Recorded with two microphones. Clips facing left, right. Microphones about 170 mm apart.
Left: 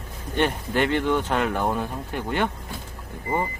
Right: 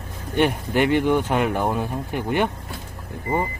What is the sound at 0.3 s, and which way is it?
Speech, 15° right (ahead or behind).